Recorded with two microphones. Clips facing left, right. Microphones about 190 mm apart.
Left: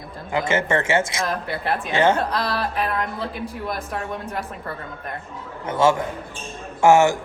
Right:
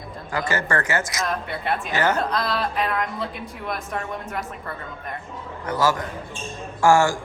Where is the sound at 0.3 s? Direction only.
25° left (ahead or behind).